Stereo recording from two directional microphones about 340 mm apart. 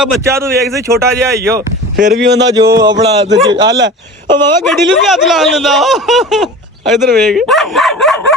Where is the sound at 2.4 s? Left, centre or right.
Centre.